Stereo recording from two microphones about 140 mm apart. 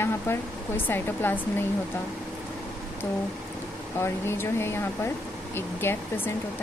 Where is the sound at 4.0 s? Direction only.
15° left (ahead or behind).